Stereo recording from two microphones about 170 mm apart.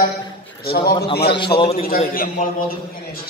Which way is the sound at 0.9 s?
30° left (ahead or behind).